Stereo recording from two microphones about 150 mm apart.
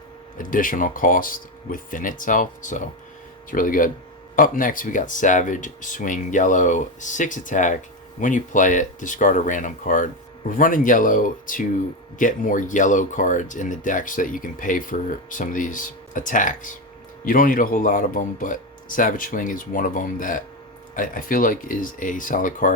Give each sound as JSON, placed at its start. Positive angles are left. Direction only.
{"t": 0.3, "sound": "speech", "side_deg": 65}